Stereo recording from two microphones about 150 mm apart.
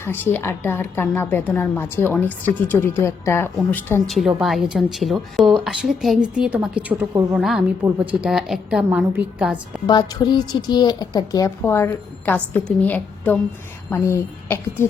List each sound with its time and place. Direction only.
0.0 s a woman's voice: 15° left (ahead or behind)
4.0 s a woman's voice: centre (ahead or behind)
9.8 s a woman's voice: 30° left (ahead or behind)